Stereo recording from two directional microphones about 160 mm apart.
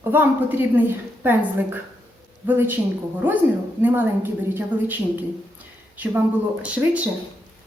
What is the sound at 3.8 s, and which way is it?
A woman's voice, 10° right (ahead or behind).